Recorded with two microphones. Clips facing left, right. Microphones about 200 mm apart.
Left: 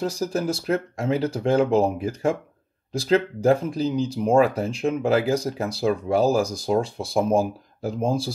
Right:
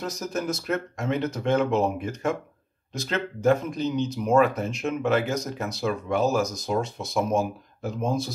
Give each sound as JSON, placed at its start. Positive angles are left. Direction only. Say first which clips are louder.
{"t": 0.0, "sound": "speech", "louder": "left 5 dB", "side_deg": 30}